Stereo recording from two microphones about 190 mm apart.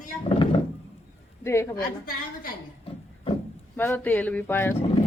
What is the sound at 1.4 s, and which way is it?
Speech, 15° left (ahead or behind).